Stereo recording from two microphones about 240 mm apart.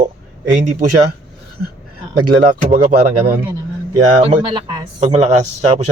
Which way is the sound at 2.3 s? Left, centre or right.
Right.